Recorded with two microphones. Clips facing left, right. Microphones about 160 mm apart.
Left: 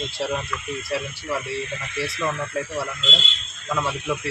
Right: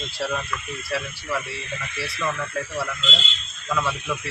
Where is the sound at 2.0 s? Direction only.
25° left (ahead or behind).